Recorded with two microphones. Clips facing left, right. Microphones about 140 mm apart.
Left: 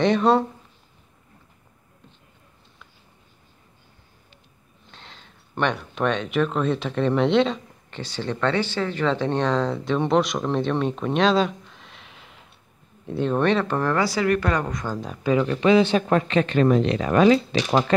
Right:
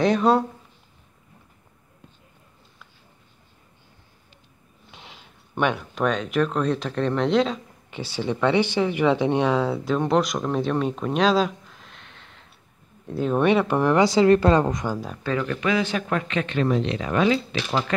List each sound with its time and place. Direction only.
0.0 s speech: centre (ahead or behind)
4.9 s speech: 10° right (ahead or behind)
14.9 s speech: 5° right (ahead or behind)
15.4 s speech: 30° left (ahead or behind)